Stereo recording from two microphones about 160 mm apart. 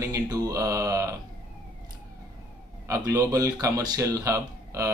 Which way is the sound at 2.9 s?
20° right (ahead or behind).